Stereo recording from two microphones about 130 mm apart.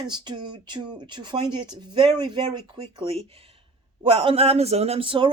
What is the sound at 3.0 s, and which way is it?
A man's voice, 45° right (ahead or behind).